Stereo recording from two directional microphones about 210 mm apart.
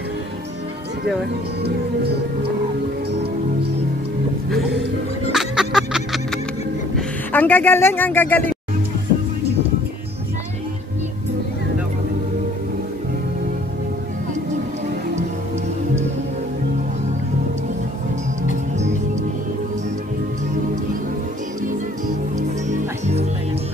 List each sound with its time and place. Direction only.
5.3 s music: centre (ahead or behind)
7.0 s speech: 10° left (ahead or behind)
22.7 s music: 30° right (ahead or behind)